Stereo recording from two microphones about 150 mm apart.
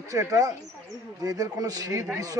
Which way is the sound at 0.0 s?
20° right (ahead or behind).